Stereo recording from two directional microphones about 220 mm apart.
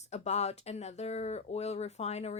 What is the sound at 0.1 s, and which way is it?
A woman's voice, 30° left (ahead or behind).